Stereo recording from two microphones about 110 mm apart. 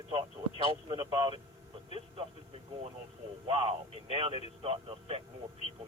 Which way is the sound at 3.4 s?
60° right (ahead or behind).